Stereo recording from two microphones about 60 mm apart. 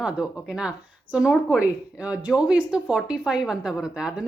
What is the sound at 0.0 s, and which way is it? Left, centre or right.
Speech, centre.